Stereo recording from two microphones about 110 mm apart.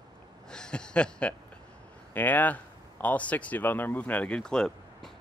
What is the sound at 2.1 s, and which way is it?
Speech, 15° left (ahead or behind).